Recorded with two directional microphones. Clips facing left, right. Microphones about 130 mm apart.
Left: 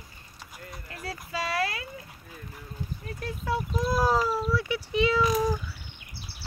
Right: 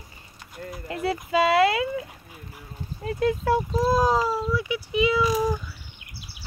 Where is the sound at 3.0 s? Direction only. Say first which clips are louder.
Right 13 dB; 90° right.